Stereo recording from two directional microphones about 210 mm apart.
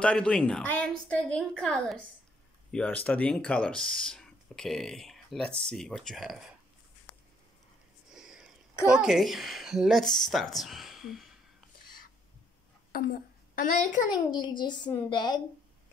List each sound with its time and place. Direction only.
0.0 s speech: 5° left (ahead or behind)
8.1 s a sound: 5° right (ahead or behind)
8.9 s speech: centre (ahead or behind)
12.9 s a woman's voice: 45° left (ahead or behind)
14.1 s a child's voice: 20° left (ahead or behind)